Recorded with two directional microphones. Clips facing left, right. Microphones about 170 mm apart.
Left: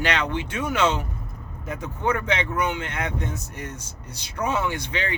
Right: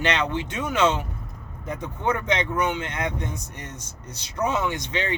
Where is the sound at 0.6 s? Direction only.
10° left (ahead or behind).